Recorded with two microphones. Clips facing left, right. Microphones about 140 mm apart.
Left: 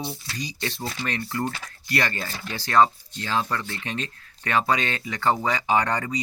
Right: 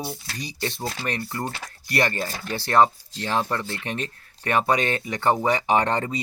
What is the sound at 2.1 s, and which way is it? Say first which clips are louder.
Speech: right 4 dB; 30° right (ahead or behind).